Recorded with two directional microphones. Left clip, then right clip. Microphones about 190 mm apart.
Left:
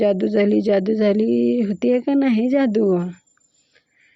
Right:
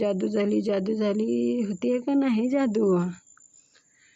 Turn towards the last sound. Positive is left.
turn(degrees=10)  # may be behind; listen again after turning